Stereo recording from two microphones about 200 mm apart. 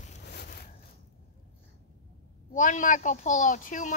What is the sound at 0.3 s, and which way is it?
Zipper, 55° left (ahead or behind).